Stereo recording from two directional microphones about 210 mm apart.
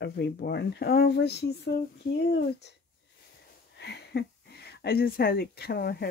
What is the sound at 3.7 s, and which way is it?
Speech, 55° left (ahead or behind).